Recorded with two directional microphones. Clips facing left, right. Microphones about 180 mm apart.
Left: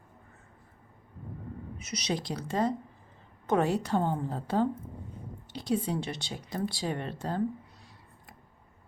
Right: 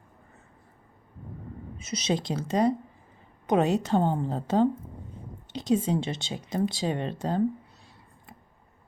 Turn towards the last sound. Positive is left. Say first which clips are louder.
# right 4 dB
turn(degrees=-20)  # may be behind; listen again after turning